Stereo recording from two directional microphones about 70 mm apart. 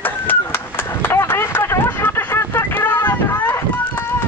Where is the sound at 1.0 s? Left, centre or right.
Left.